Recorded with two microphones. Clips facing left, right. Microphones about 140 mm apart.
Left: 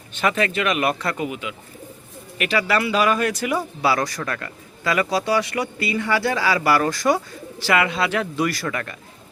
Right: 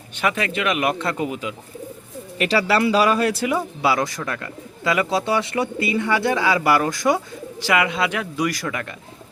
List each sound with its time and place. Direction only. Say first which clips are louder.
0.2 s a man's voice: left 1 dB; 10° right (ahead or behind)